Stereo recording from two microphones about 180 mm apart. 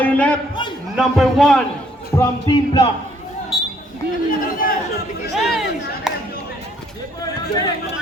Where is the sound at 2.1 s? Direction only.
25° left (ahead or behind).